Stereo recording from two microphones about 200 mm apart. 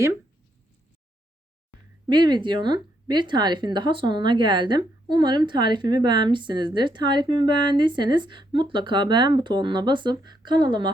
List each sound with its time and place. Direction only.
2.0 s a woman's voice: 20° right (ahead or behind)